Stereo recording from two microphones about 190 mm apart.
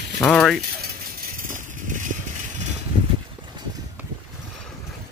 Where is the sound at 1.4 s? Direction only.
45° right (ahead or behind).